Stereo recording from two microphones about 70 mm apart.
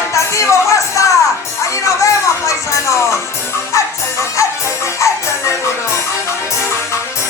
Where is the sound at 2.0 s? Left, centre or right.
Left.